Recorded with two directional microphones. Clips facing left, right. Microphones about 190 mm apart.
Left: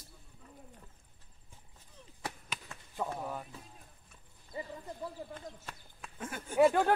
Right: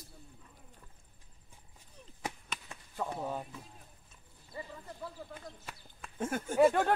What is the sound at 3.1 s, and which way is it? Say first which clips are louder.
Music: right 2 dB; 20° right (ahead or behind).